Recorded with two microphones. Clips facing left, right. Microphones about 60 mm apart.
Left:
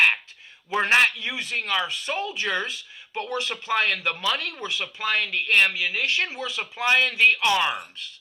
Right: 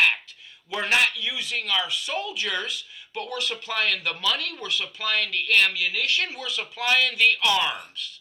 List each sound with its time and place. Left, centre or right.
0.7 s speech: left